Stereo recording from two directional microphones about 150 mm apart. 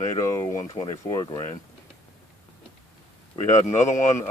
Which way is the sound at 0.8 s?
30° left (ahead or behind).